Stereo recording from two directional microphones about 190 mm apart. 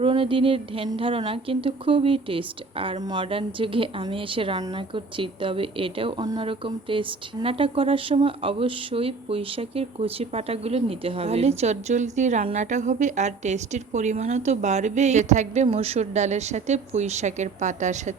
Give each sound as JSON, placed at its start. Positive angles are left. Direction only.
{"t": 0.0, "sound": "a woman's voice", "side_deg": -30}